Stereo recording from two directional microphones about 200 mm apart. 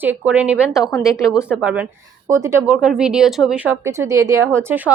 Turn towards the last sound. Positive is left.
turn(degrees=-10)  # may be behind; listen again after turning